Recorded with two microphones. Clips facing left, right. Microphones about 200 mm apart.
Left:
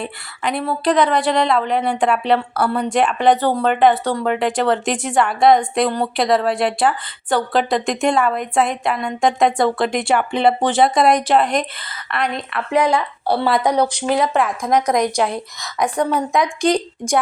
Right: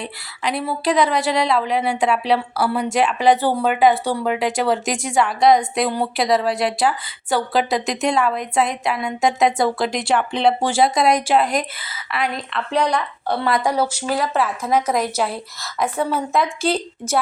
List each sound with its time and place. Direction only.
0.0 s a woman's voice: centre (ahead or behind)
12.7 s a woman's voice: 20° left (ahead or behind)
13.7 s a woman's voice: 5° right (ahead or behind)